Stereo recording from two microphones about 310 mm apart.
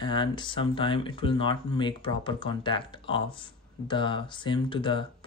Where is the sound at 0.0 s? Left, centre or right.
Centre.